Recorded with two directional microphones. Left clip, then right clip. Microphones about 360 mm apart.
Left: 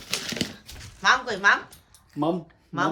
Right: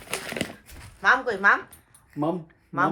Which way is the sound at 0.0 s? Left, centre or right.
Centre.